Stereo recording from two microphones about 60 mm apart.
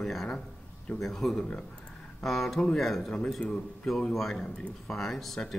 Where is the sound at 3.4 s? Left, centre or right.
Left.